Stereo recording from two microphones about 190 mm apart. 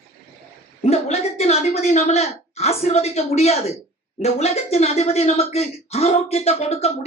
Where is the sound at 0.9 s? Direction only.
35° left (ahead or behind).